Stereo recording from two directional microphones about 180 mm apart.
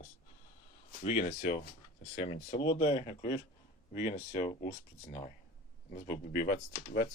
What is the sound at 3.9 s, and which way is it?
Speech, 45° left (ahead or behind).